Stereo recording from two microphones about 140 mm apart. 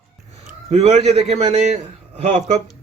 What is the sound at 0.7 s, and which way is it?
Speech, 50° right (ahead or behind).